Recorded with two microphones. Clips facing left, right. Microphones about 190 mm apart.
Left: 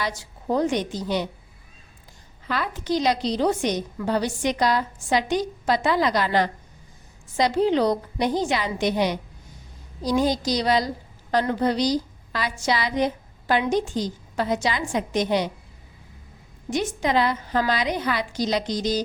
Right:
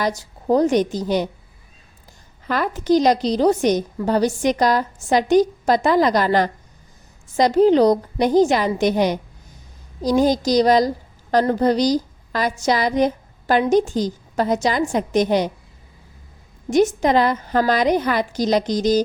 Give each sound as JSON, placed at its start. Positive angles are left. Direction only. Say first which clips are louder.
{"t": 0.0, "sound": "a woman's voice", "louder": "right 6 dB", "side_deg": -40}
{"t": 2.5, "sound": "a woman's voice", "louder": "right 7 dB", "side_deg": -45}
{"t": 16.6, "sound": "a woman's voice", "louder": "right 8 dB", "side_deg": -45}